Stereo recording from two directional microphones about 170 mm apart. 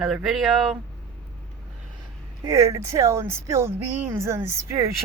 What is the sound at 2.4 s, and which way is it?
Speech, 15° right (ahead or behind).